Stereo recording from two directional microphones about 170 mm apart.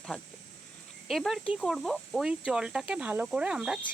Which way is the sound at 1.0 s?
Centre (ahead or behind).